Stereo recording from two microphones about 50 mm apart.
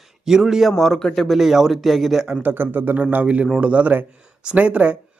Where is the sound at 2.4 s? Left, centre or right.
Right.